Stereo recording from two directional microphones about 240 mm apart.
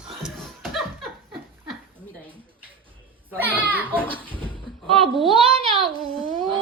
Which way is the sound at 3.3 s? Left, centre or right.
Centre.